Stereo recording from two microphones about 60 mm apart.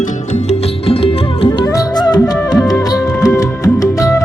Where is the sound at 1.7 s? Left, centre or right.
Left.